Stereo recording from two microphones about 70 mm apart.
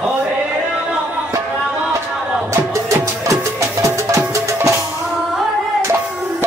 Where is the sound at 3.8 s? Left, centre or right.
Right.